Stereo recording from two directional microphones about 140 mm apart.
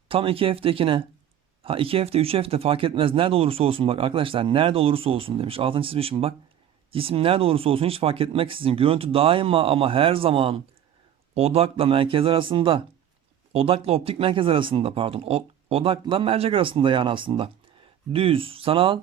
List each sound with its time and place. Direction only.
0.1 s speech: 40° right (ahead or behind)